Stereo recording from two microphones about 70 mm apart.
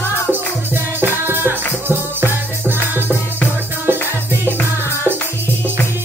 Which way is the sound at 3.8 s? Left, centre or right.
Right.